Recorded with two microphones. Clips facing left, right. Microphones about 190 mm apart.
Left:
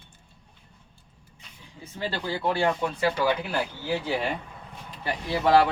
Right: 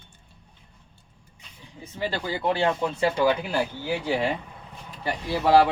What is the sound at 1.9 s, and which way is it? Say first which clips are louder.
Speech: right 1 dB; 15° right (ahead or behind).